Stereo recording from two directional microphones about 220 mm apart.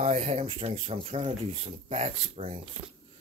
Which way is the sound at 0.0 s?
30° right (ahead or behind).